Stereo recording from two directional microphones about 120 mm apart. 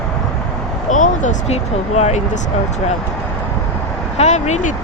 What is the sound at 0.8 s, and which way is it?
Speech, 90° left.